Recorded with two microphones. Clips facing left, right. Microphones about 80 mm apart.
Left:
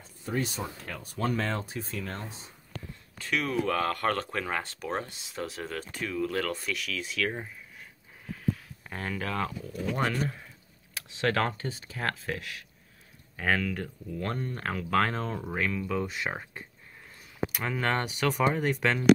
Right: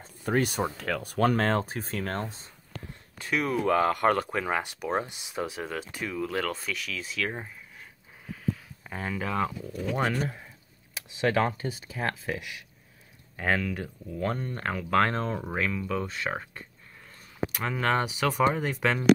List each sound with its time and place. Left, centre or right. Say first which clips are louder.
0.2 s speech: right 6 dB; right
3.2 s speech: right 2 dB; centre
8.8 s speech: right 2 dB; centre